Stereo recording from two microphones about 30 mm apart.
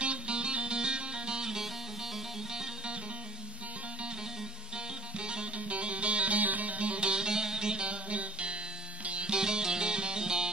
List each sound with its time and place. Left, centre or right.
0.0 s music: right; by 1.7 s centre
4.7 s music: right
5.6 s music: right
6.4 s music: right
9.3 s music: right